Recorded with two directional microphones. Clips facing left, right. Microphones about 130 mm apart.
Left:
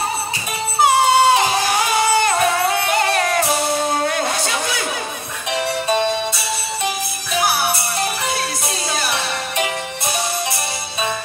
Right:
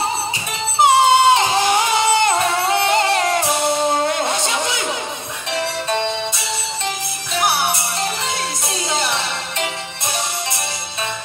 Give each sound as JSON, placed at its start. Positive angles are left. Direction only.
{"t": 0.7, "sound": "music", "side_deg": -20}
{"t": 5.5, "sound": "music", "side_deg": 10}
{"t": 7.3, "sound": "music", "side_deg": -20}
{"t": 8.9, "sound": "music", "side_deg": -20}